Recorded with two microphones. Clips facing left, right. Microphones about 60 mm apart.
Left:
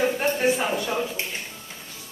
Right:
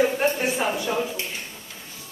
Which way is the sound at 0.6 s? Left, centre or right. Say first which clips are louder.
Right 1 dB; centre.